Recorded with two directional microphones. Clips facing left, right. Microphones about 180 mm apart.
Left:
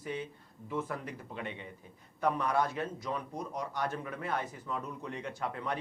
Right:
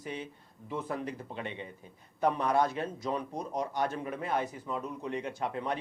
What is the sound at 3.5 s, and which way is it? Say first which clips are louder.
Speech: right 4 dB; 25° right (ahead or behind).